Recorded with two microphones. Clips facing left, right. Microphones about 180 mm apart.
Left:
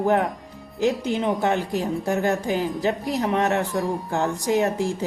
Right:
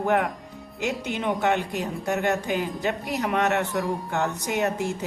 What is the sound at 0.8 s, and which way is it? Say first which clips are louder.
Speech: left 6 dB; 35° left (ahead or behind).